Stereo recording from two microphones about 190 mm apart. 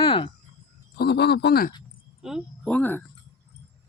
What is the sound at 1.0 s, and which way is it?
Speech, 60° left (ahead or behind).